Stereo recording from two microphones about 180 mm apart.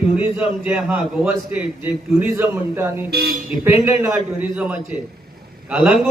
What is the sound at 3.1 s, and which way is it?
Speech, 60° right (ahead or behind).